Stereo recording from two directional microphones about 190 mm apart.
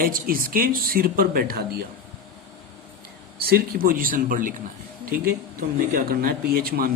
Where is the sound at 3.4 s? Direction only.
55° right (ahead or behind).